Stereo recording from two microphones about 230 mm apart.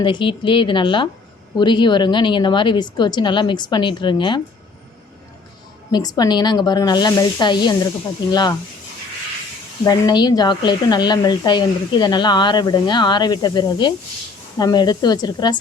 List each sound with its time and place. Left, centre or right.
0.0 s speech: left
5.9 s speech: centre
9.8 s speech: centre